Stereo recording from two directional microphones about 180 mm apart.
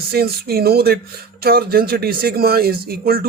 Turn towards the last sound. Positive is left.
turn(degrees=-55)  # may be behind; listen again after turning